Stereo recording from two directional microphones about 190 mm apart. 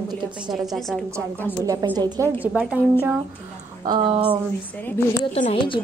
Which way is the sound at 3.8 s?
25° right (ahead or behind).